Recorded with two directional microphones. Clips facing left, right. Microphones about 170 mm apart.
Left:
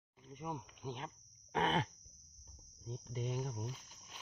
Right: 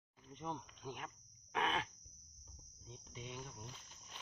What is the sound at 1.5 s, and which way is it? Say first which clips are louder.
Cough: left 4 dB; 30° left (ahead or behind).